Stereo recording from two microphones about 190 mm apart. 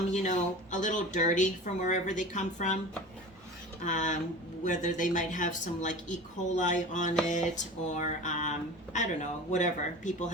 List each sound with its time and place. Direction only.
0.1 s speech: 40° left (ahead or behind)
3.8 s speech: 40° left (ahead or behind)